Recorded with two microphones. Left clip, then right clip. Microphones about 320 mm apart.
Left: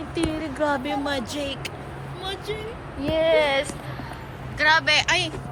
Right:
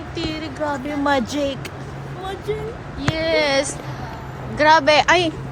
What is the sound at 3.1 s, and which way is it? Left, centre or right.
Speech, centre.